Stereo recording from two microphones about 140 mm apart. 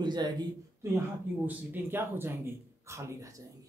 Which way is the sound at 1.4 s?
10° right (ahead or behind).